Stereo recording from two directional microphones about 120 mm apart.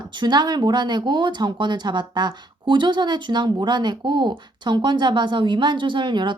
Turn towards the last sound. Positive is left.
turn(degrees=-40)  # may be behind; listen again after turning